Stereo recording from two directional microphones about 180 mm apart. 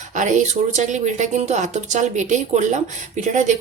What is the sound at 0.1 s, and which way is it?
Speech, 45° right (ahead or behind).